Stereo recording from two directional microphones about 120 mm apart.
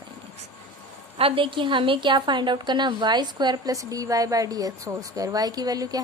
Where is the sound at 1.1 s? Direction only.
50° right (ahead or behind).